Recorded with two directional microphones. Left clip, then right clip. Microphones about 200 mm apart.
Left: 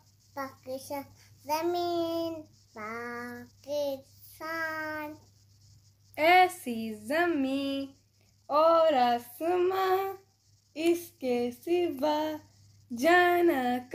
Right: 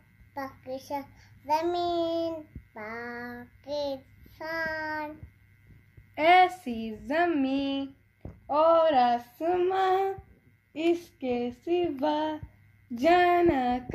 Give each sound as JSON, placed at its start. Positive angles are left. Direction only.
{"t": 0.3, "sound": "a child's voice", "side_deg": 20}
{"t": 6.1, "sound": "speech", "side_deg": 0}
{"t": 8.5, "sound": "female singing", "side_deg": 5}
{"t": 10.7, "sound": "speech", "side_deg": 5}